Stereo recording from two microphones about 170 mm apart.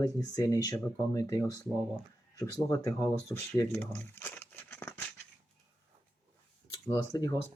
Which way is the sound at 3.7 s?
10° left (ahead or behind).